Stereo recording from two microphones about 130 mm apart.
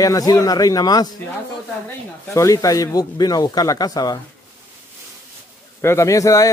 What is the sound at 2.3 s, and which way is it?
A man's voice, 25° left (ahead or behind).